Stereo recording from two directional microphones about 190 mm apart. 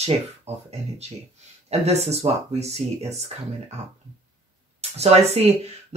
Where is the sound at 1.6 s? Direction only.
35° right (ahead or behind).